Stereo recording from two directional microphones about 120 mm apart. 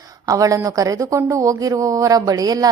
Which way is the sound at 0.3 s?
30° right (ahead or behind).